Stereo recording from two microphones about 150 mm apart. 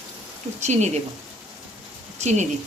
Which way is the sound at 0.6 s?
50° right (ahead or behind).